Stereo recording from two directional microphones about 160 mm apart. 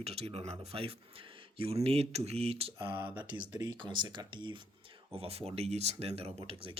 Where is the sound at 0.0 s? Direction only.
40° right (ahead or behind).